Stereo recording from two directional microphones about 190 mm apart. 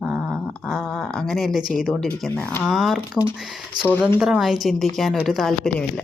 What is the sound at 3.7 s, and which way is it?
Speech, 20° right (ahead or behind).